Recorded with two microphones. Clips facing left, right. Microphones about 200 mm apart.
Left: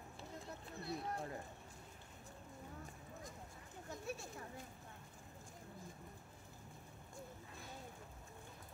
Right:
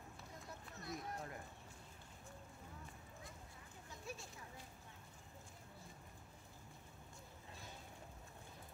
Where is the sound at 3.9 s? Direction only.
55° left (ahead or behind).